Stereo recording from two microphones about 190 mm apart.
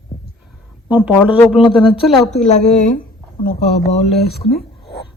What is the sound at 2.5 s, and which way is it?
Speech, 35° left (ahead or behind).